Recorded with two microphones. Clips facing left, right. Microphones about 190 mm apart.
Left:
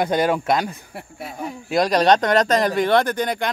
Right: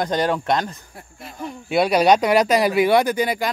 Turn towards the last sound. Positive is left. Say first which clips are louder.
# right 2 dB
turn(degrees=-5)  # may be behind; listen again after turning